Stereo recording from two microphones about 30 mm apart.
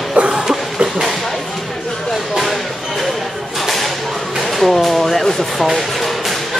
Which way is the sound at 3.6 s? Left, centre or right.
Centre.